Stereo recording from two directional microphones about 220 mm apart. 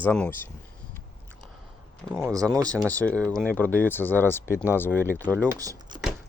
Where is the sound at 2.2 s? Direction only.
15° right (ahead or behind).